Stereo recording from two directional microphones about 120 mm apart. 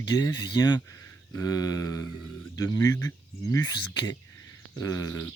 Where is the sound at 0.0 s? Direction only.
40° left (ahead or behind).